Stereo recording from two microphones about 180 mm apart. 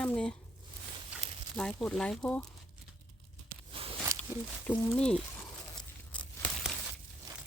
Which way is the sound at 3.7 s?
30° right (ahead or behind).